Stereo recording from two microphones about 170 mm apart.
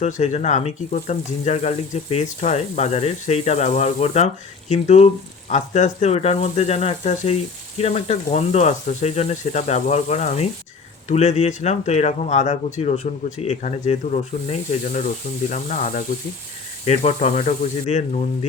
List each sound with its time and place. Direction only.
0.0 s speech: 45° left (ahead or behind)